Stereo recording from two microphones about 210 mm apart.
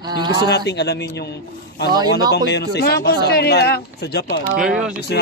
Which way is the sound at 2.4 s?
50° left (ahead or behind).